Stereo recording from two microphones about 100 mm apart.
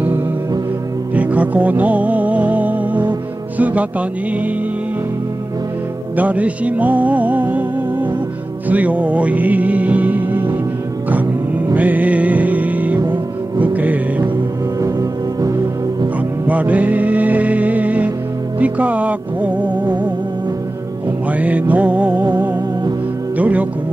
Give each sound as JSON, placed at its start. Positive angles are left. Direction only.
{"t": 1.1, "sound": "music", "side_deg": -15}
{"t": 3.5, "sound": "speech", "side_deg": -15}
{"t": 6.1, "sound": "music", "side_deg": -15}
{"t": 11.7, "sound": "music", "side_deg": -15}
{"t": 14.8, "sound": "music", "side_deg": -35}
{"t": 16.4, "sound": "music", "side_deg": -15}
{"t": 21.3, "sound": "music", "side_deg": -15}
{"t": 23.3, "sound": "music", "side_deg": -15}